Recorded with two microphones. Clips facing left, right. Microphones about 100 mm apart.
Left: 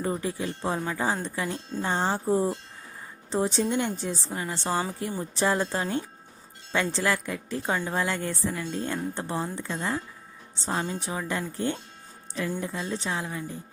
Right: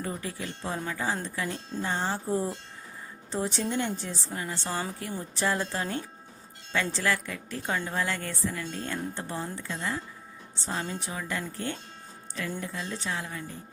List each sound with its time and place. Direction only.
0.0 s a woman's voice: 25° left (ahead or behind)